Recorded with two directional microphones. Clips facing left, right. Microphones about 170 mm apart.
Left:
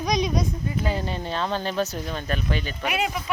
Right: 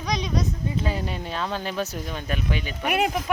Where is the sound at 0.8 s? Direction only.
30° left (ahead or behind).